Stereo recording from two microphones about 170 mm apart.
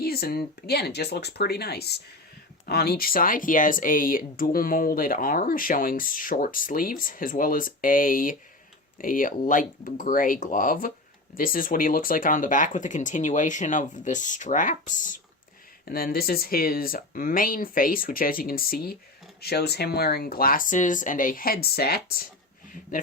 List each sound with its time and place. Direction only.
0.0 s speech: 65° left (ahead or behind)
15.9 s speech: 60° left (ahead or behind)